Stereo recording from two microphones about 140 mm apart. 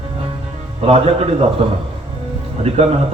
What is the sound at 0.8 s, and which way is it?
Speech, 45° right (ahead or behind).